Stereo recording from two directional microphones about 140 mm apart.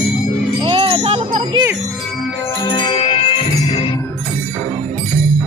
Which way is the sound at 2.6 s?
35° left (ahead or behind).